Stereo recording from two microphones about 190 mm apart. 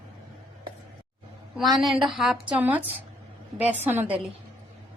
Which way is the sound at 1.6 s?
Centre (ahead or behind).